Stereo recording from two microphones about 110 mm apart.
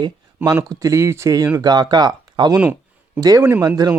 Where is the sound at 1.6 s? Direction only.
40° right (ahead or behind).